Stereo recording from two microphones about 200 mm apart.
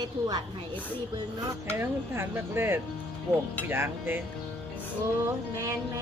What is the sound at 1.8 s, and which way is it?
Speech, 10° right (ahead or behind).